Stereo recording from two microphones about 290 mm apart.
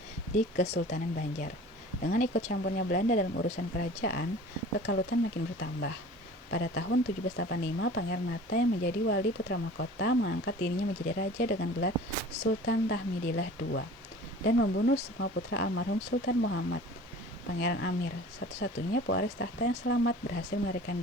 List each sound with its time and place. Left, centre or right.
0.3 s speech: left
6.5 s speech: left